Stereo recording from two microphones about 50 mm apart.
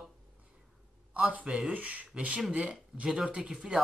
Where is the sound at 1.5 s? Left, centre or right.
Centre.